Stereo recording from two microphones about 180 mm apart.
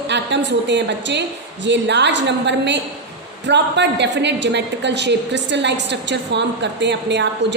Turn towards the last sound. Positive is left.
turn(degrees=-75)  # may be behind; listen again after turning